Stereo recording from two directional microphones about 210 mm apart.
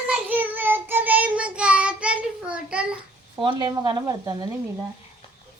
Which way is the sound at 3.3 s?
20° right (ahead or behind).